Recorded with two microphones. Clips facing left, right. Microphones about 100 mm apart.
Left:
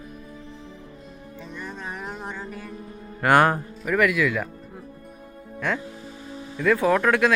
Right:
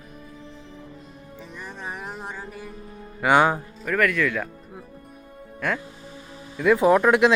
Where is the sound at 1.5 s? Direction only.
5° right (ahead or behind).